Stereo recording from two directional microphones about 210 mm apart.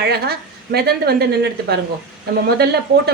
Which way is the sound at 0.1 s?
50° right (ahead or behind).